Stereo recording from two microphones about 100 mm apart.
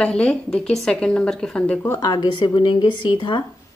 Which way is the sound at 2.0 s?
45° left (ahead or behind).